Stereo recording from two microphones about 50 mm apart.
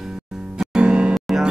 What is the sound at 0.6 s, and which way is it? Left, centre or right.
Music, centre.